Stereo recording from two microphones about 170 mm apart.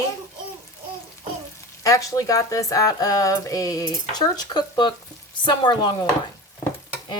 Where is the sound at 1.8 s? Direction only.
20° left (ahead or behind).